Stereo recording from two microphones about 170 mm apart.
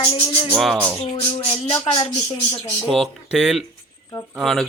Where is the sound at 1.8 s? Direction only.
25° left (ahead or behind).